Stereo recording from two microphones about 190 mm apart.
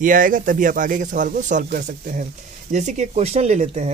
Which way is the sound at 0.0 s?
45° right (ahead or behind).